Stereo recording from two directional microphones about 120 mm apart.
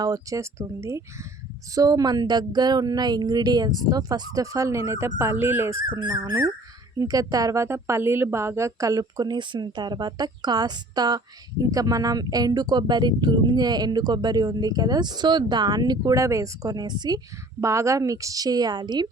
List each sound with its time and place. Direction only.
0.0 s speech: 30° right (ahead or behind)
6.0 s speech: 35° right (ahead or behind)
17.6 s speech: 25° right (ahead or behind)